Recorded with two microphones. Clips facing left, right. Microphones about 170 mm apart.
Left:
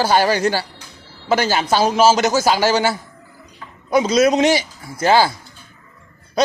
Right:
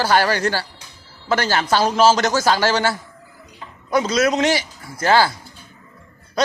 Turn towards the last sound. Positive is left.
turn(degrees=15)  # may be behind; listen again after turning